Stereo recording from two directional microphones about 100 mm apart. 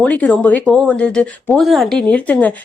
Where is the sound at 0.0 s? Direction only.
15° left (ahead or behind).